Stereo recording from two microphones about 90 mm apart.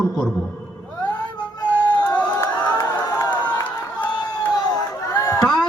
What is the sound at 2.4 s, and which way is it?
Crowd, 35° left (ahead or behind).